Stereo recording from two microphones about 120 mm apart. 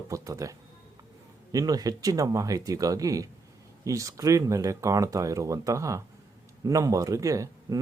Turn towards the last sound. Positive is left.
turn(degrees=-25)  # may be behind; listen again after turning